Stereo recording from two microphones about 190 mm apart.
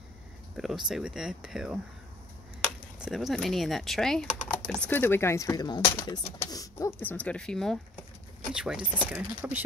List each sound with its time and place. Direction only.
0.6 s speech: centre (ahead or behind)
3.0 s speech: centre (ahead or behind)